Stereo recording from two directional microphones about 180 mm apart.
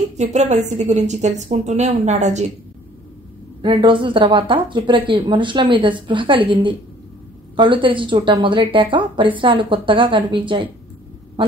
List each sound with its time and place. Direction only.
0.2 s a woman's voice: 40° right (ahead or behind)
3.6 s a woman's voice: 30° right (ahead or behind)